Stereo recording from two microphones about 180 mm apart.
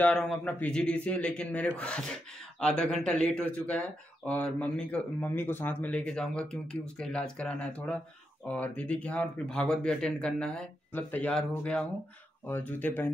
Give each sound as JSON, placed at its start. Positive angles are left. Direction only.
{"t": 0.0, "sound": "a man's voice", "side_deg": 5}